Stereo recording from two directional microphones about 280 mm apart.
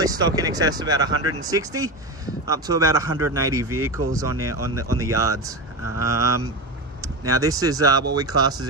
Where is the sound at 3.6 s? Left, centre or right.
Right.